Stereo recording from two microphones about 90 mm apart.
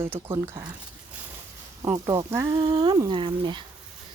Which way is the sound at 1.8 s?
35° right (ahead or behind).